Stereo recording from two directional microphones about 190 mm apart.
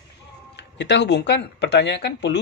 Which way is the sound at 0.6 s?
65° left (ahead or behind).